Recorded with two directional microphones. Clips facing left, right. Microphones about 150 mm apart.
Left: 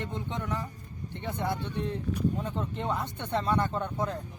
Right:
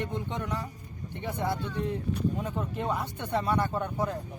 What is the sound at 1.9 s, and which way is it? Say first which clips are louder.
Speech: even; 10° right (ahead or behind).